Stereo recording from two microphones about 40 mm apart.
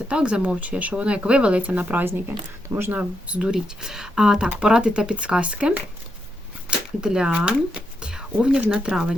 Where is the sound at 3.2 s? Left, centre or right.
Right.